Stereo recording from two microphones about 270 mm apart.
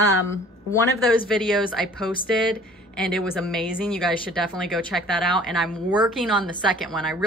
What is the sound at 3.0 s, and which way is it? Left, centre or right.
Speech, centre.